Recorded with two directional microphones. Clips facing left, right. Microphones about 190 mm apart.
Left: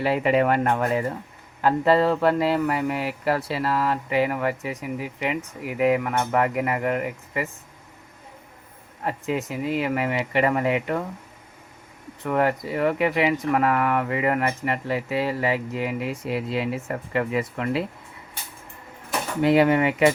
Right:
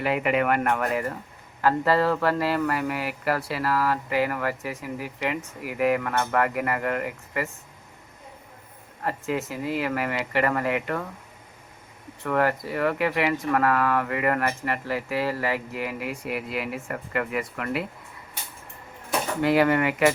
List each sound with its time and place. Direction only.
0.0 s speech: 30° left (ahead or behind)
9.0 s speech: 15° left (ahead or behind)
12.2 s speech: 20° left (ahead or behind)
19.4 s speech: 20° left (ahead or behind)